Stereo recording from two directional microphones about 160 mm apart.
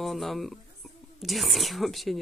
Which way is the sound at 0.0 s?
Centre (ahead or behind).